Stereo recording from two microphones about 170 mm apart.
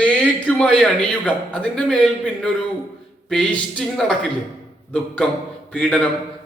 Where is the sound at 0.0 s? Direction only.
5° left (ahead or behind).